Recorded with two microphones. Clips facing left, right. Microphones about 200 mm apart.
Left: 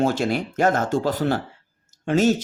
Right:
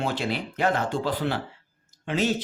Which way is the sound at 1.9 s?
45° left (ahead or behind).